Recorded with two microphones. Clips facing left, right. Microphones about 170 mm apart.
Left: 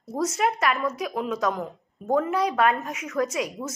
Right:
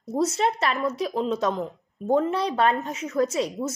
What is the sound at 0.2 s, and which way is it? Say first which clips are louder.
A woman's voice: right 1 dB; 30° right (ahead or behind).